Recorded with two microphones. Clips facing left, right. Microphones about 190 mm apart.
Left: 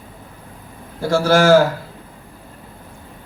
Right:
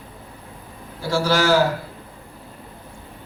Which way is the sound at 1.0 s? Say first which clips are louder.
Left 5 dB; 50° left (ahead or behind).